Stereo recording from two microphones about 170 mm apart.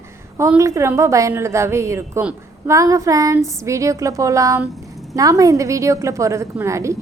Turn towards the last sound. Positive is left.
turn(degrees=-15)  # may be behind; listen again after turning